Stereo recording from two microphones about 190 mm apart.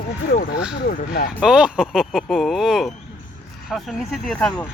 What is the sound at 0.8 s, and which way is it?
Speech, 55° left (ahead or behind).